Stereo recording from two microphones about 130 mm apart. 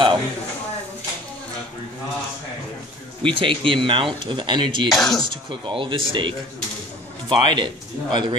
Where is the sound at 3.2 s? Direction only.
40° right (ahead or behind).